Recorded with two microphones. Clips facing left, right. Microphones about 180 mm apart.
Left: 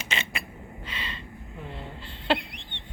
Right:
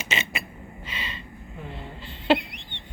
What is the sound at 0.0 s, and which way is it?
Gasp, 5° right (ahead or behind).